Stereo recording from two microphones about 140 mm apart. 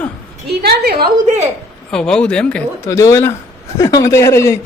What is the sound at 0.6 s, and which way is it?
Speech, 90° right.